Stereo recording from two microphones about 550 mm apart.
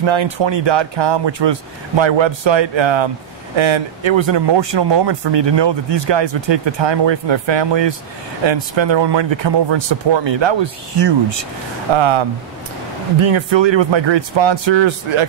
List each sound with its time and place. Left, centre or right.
0.0 s speech: right